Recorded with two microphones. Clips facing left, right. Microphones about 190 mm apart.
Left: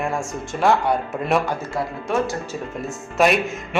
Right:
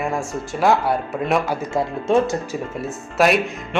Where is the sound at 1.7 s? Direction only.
25° right (ahead or behind).